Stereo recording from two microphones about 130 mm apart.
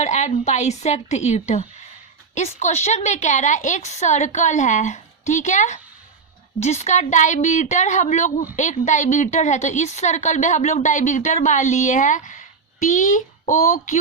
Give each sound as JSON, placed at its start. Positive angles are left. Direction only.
{"t": 0.0, "sound": "a woman's voice", "side_deg": 60}